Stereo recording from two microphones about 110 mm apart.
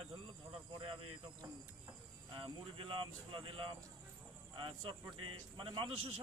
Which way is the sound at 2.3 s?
55° right (ahead or behind).